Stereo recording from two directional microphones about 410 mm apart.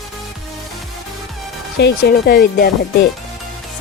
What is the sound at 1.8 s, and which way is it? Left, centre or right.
Speech, left.